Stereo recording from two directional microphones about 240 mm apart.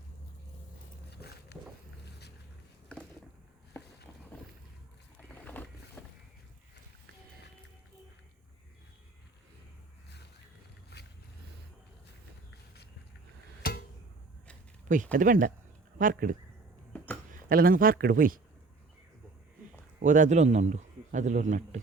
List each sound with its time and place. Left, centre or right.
1.1 s a sound: left
5.3 s boat: centre
10.9 s boat: left
13.6 s a sound: left
14.8 s a man's voice: right
17.3 s a man's voice: right
20.1 s a man's voice: right